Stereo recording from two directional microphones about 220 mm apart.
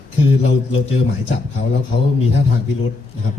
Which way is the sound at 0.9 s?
55° left (ahead or behind).